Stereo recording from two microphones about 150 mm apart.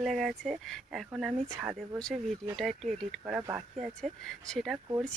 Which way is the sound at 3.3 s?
15° right (ahead or behind).